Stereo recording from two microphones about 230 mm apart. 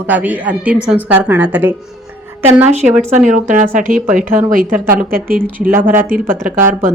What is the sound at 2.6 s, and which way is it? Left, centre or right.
Speech, right.